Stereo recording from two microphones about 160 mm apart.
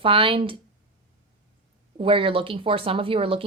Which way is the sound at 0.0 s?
35° right (ahead or behind).